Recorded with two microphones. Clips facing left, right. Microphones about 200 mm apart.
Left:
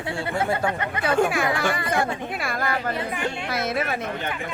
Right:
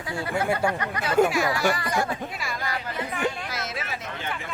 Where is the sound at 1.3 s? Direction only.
55° left (ahead or behind).